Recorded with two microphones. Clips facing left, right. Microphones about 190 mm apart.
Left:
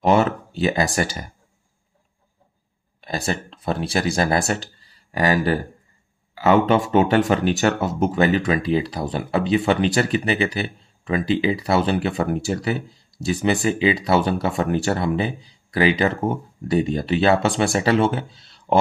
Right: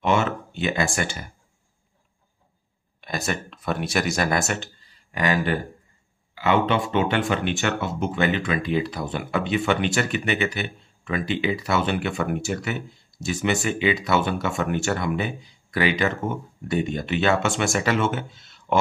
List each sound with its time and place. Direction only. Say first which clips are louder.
0.0 s speech: left 5 dB; 35° left (ahead or behind)
3.0 s speech: left 3 dB; 30° left (ahead or behind)